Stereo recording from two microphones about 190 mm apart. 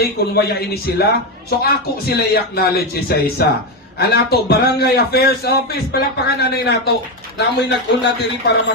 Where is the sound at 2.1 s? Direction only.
55° left (ahead or behind).